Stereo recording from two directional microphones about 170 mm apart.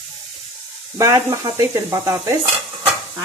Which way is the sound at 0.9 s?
20° right (ahead or behind).